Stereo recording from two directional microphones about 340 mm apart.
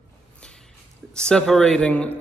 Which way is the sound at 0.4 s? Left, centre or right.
Centre.